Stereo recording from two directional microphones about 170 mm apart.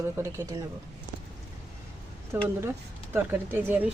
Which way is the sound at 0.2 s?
15° right (ahead or behind).